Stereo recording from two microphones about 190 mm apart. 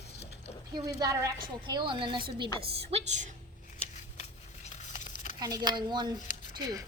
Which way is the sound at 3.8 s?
35° left (ahead or behind).